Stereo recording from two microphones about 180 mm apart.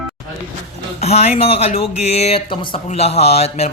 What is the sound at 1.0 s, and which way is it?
Speech, 35° left (ahead or behind).